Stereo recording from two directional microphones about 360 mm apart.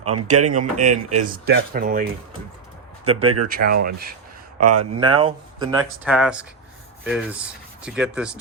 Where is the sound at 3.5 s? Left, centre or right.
Right.